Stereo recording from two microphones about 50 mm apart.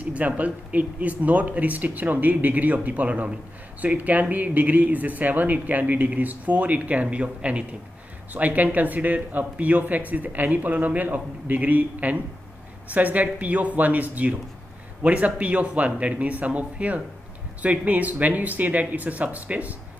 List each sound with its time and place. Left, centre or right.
0.0 s speech: right